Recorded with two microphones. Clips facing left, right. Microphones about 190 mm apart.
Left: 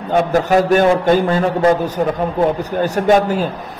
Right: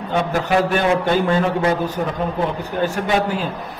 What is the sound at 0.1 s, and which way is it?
A man's voice, 40° left (ahead or behind).